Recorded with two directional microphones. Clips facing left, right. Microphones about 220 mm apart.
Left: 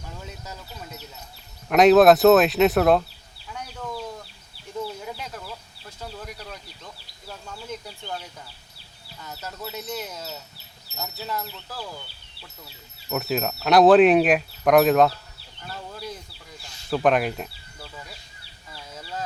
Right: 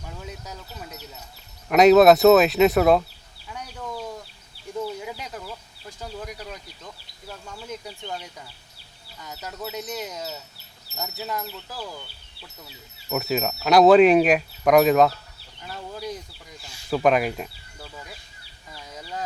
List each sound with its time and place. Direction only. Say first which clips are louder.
1.7 s speech: right 1 dB; centre (ahead or behind)
5.0 s chicken: even; 10° right (ahead or behind)
9.2 s speech: right 1 dB; 10° right (ahead or behind)
11.0 s speech: right 1 dB; 10° right (ahead or behind)
13.1 s speech: right 1 dB; 5° right (ahead or behind)
15.7 s speech: right 3 dB; 15° right (ahead or behind)
16.9 s speech: right 1 dB; centre (ahead or behind)
18.7 s a sound: even; 15° right (ahead or behind)